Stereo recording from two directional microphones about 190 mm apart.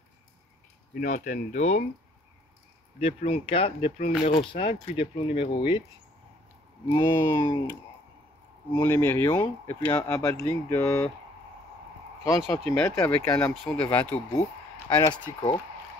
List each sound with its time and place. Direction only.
0.9 s speech: 40° left (ahead or behind)
3.0 s speech: 30° left (ahead or behind)
6.9 s speech: 20° left (ahead or behind)
8.7 s speech: 15° left (ahead or behind)
12.6 s speech: 15° left (ahead or behind)
15.0 s speech: 25° left (ahead or behind)